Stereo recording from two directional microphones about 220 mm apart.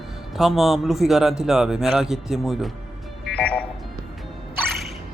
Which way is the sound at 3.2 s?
5° left (ahead or behind).